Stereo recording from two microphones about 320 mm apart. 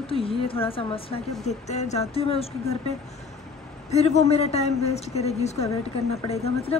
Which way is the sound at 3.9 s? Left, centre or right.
Centre.